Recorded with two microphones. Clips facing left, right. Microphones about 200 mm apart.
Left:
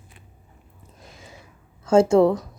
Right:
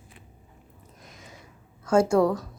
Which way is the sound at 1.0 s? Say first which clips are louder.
Left 3 dB; 30° left (ahead or behind).